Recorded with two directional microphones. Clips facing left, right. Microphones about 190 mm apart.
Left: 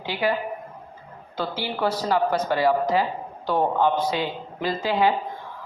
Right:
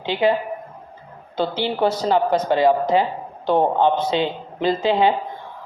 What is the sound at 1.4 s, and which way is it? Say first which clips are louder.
A woman's voice: right 6 dB; 25° right (ahead or behind).